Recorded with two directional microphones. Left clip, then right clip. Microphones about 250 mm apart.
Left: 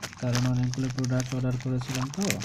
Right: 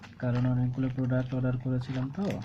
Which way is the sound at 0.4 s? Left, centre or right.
Centre.